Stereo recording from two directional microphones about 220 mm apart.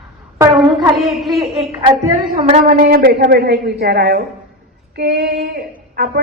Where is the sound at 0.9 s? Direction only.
Centre (ahead or behind).